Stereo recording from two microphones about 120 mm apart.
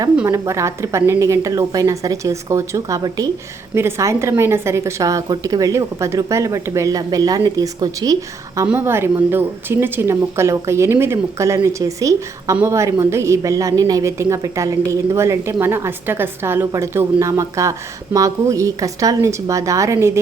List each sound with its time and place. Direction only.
0.3 s a woman's voice: 25° right (ahead or behind)
8.6 s a woman's voice: 20° right (ahead or behind)